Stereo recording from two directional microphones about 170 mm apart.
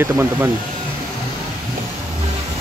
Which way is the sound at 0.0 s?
15° right (ahead or behind).